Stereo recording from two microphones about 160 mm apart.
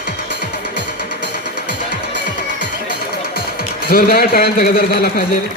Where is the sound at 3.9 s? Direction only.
70° left (ahead or behind).